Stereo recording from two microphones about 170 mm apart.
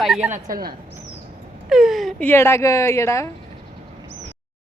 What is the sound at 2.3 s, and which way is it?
Speech, 15° left (ahead or behind).